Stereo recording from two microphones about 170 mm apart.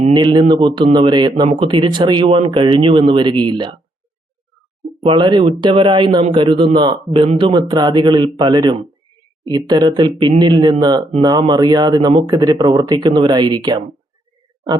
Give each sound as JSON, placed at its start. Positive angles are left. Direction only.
{"t": 0.1, "sound": "speech", "side_deg": -25}
{"t": 5.0, "sound": "speech", "side_deg": -25}